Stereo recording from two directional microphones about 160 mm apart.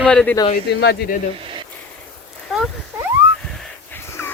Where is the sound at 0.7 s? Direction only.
90° left.